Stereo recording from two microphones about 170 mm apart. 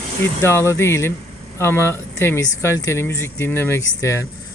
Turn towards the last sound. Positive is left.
turn(degrees=15)  # may be behind; listen again after turning